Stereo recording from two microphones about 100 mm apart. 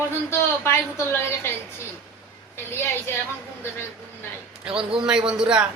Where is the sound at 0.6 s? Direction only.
25° left (ahead or behind).